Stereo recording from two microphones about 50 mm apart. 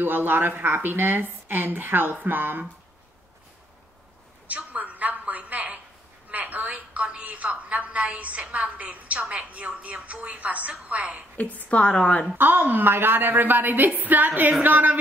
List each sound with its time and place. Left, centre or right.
0.0 s a woman's voice: right
4.5 s a sound: right
6.3 s a woman's voice: right
11.3 s a woman's voice: left
12.4 s a woman's voice: right